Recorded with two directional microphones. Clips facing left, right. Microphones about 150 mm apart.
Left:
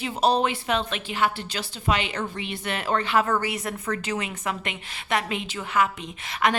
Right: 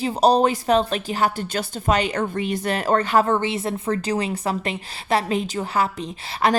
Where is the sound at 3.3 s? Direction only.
25° right (ahead or behind).